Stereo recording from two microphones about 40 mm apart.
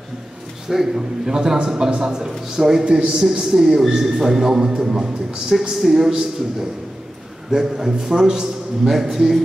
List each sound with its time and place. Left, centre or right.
0.7 s a man's voice: centre
2.8 s a man's voice: right
5.5 s a man's voice: centre
7.5 s a man's voice: centre